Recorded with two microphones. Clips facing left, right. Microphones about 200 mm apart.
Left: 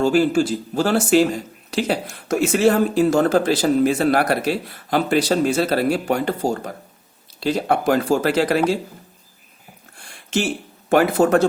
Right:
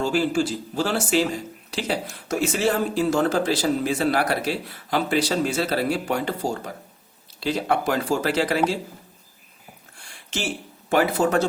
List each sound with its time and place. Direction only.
0.0 s speech: 50° left (ahead or behind)
10.8 s speech: 55° left (ahead or behind)